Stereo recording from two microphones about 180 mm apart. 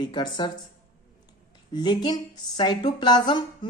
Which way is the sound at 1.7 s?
25° left (ahead or behind).